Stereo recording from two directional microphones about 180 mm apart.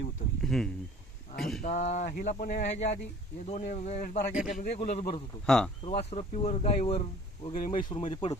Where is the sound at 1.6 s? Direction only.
40° left (ahead or behind).